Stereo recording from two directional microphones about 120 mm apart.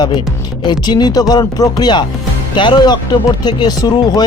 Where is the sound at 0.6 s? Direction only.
35° left (ahead or behind).